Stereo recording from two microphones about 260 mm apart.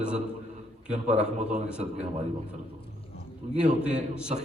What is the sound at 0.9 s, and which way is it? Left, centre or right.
A man's voice, right.